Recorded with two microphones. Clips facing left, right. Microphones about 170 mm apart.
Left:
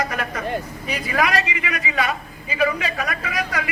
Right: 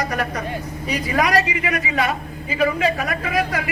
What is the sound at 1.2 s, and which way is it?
A man's voice, 45° right (ahead or behind).